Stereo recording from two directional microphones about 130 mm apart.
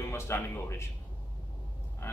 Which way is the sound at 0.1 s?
20° left (ahead or behind).